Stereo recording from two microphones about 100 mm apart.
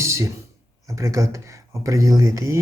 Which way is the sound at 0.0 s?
30° right (ahead or behind).